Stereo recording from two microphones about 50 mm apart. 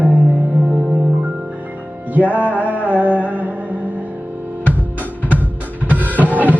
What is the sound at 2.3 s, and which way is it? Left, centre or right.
Music, right.